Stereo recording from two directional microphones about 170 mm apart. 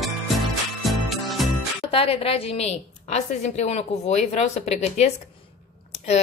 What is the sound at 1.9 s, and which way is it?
A woman's voice, 35° left (ahead or behind).